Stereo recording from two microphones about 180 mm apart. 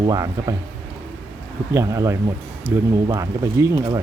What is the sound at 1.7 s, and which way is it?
Speech, 15° right (ahead or behind).